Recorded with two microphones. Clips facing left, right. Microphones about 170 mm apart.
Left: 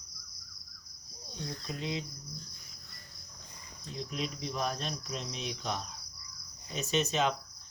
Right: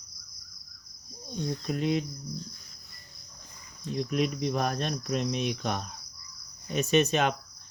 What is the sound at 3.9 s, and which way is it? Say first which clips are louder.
Cricket: right 9 dB; 60° right (ahead or behind).